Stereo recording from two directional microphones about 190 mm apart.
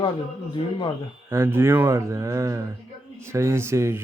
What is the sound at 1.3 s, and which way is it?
Speech, 15° right (ahead or behind).